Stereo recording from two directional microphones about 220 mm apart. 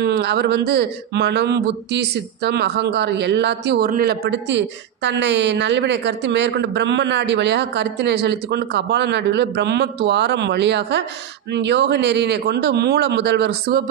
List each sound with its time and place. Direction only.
0.0 s speech: 50° right (ahead or behind)